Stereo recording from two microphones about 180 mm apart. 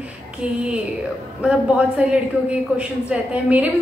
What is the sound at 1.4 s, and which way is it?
A woman's voice, 5° right (ahead or behind).